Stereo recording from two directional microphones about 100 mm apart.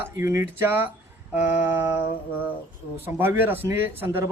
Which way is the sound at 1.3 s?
20° right (ahead or behind).